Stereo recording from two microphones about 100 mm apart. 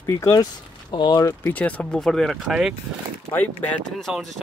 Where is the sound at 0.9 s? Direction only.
45° left (ahead or behind).